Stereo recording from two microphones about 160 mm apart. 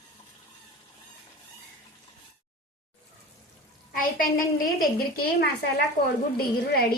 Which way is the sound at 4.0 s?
60° left (ahead or behind).